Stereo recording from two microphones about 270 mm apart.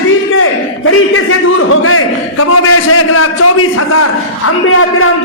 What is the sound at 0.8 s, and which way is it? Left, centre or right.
A man's voice, left.